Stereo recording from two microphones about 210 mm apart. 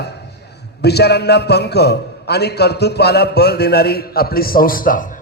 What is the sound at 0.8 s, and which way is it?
A man's voice, 50° left (ahead or behind).